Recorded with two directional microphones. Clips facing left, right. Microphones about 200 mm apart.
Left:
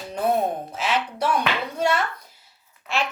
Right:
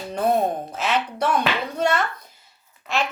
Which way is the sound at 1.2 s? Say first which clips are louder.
Right 1 dB; 5° left (ahead or behind).